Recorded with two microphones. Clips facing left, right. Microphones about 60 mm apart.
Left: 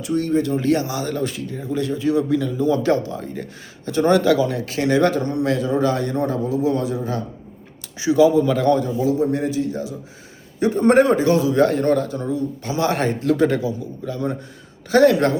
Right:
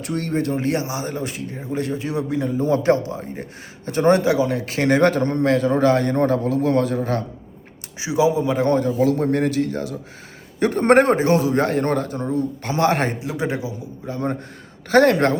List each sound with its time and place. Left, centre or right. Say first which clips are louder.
0.0 s a man's voice: left 3 dB; right
7.9 s speech: left 4 dB; centre
8.6 s a man's voice: even; right
13.1 s speech: left 7 dB; centre
14.0 s a man's voice: right 1 dB; right